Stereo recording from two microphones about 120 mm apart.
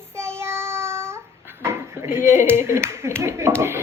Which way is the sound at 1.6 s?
20° right (ahead or behind).